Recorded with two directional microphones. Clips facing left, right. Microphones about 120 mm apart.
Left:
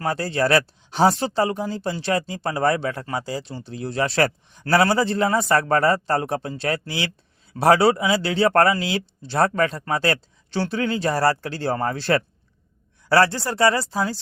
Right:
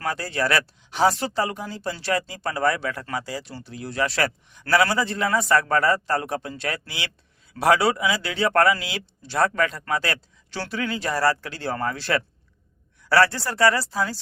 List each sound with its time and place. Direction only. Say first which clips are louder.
0.0 s speech: left 4 dB; 30° left (ahead or behind)